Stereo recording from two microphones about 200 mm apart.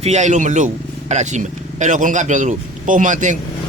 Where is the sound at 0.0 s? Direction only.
35° right (ahead or behind).